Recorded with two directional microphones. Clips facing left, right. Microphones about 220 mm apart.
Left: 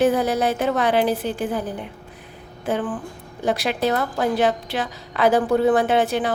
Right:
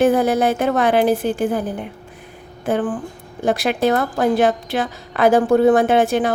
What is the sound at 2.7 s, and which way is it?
A woman's voice, 50° right (ahead or behind).